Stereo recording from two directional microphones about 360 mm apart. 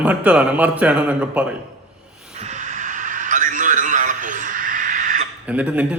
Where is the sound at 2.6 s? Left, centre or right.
Right.